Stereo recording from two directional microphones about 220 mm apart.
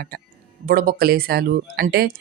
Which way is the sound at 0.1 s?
40° right (ahead or behind).